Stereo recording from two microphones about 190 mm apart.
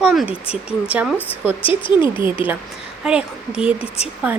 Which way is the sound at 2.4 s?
25° left (ahead or behind).